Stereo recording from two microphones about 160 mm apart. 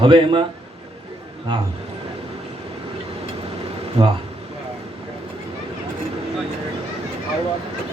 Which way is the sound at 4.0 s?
35° right (ahead or behind).